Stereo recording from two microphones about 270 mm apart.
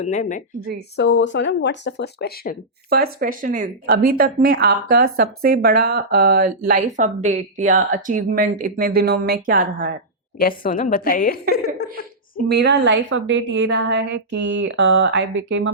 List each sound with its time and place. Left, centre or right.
0.0 s speech: left
0.9 s speech: left
2.9 s speech: right
10.3 s speech: left
11.5 s laughter: left
12.5 s speech: right